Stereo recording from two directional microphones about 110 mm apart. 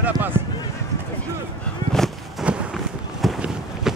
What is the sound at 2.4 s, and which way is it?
Run, 10° right (ahead or behind).